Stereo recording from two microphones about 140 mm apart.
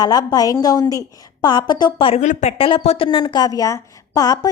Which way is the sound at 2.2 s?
55° left (ahead or behind).